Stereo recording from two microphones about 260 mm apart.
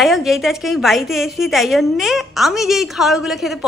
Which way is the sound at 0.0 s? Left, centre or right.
Centre.